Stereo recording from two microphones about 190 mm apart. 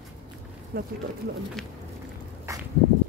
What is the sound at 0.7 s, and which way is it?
Speech, 55° right (ahead or behind).